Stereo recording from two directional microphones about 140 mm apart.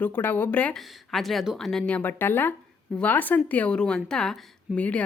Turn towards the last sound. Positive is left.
turn(degrees=10)  # may be behind; listen again after turning